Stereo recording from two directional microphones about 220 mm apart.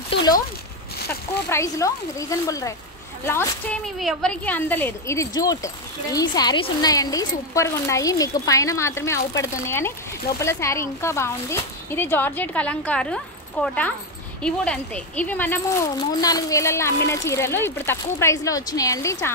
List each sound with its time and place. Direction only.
1.5 s speech: 15° left (ahead or behind)